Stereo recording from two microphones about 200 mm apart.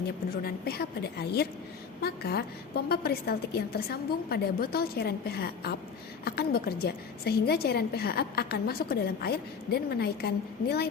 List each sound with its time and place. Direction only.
0.4 s a woman's voice: 50° left (ahead or behind)